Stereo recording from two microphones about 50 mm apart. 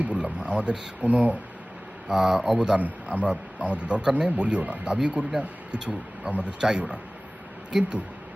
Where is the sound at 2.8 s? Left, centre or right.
Right.